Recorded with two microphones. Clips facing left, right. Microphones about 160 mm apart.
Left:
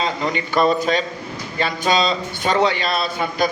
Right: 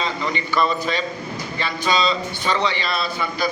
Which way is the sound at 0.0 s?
40° left (ahead or behind).